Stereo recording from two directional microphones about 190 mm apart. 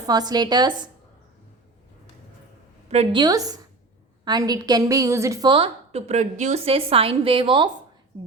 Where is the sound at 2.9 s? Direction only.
35° right (ahead or behind).